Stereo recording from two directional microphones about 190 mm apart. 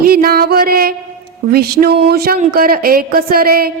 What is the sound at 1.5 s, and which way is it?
Speech, 55° right (ahead or behind).